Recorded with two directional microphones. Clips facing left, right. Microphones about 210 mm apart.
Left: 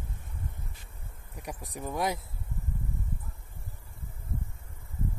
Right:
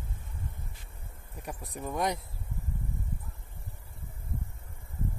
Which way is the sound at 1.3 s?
10° left (ahead or behind).